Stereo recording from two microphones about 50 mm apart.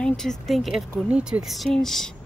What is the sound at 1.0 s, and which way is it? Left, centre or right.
Speech, right.